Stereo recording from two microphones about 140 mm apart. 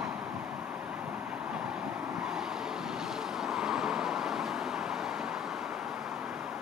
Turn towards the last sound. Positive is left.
turn(degrees=-5)  # may be behind; listen again after turning